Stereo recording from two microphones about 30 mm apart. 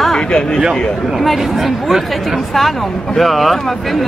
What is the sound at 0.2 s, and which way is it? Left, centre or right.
Speech, left.